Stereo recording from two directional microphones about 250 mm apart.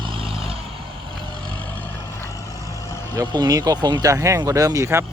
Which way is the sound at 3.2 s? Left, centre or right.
Centre.